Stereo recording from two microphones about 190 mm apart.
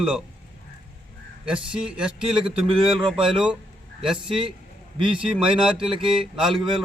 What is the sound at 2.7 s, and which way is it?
Speech, 25° right (ahead or behind).